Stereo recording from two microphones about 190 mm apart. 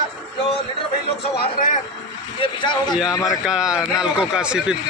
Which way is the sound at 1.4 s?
50° left (ahead or behind).